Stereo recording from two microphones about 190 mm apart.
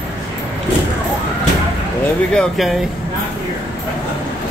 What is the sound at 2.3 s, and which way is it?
Speech, centre (ahead or behind).